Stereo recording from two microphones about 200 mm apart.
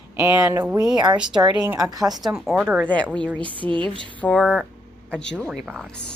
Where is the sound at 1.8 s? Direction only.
20° right (ahead or behind).